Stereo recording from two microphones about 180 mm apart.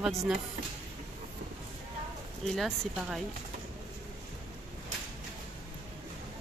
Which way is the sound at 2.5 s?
Centre (ahead or behind).